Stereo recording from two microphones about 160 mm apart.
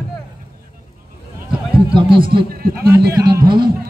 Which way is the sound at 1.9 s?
30° right (ahead or behind).